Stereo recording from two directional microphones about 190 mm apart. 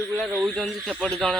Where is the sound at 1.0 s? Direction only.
5° left (ahead or behind).